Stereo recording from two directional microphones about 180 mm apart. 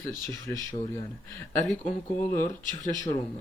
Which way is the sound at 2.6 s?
45° left (ahead or behind).